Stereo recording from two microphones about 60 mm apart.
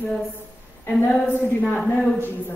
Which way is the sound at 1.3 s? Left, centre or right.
Left.